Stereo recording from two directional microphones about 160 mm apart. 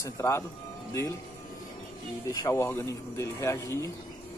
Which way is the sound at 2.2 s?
20° left (ahead or behind).